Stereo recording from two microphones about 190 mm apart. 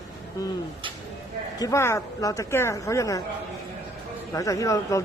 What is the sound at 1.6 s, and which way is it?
Speech, 15° left (ahead or behind).